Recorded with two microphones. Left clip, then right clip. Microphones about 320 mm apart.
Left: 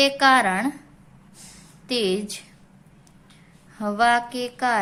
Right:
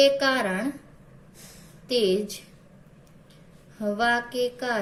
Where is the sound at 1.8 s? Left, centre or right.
Left.